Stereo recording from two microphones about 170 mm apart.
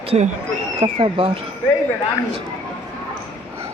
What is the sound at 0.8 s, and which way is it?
Speech, 30° right (ahead or behind).